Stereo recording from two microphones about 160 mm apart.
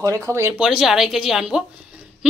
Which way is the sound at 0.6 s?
Centre (ahead or behind).